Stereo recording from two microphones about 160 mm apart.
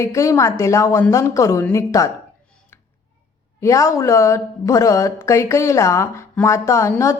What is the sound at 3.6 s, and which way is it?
Speech, 20° left (ahead or behind).